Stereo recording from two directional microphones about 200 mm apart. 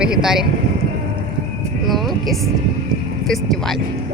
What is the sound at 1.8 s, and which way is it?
Music, centre (ahead or behind).